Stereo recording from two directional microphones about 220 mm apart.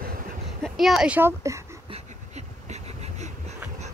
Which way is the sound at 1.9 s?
30° right (ahead or behind).